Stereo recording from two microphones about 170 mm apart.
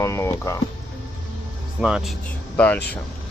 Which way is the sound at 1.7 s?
5° right (ahead or behind).